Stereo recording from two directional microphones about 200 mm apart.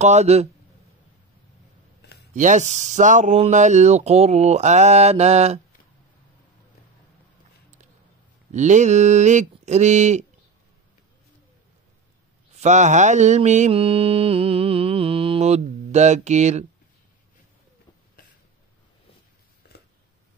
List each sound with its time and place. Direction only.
0.0 s speech: 35° right (ahead or behind)
2.0 s a sound: 55° left (ahead or behind)
2.3 s speech: 40° right (ahead or behind)
8.5 s speech: 35° right (ahead or behind)
12.5 s mantra: 35° right (ahead or behind)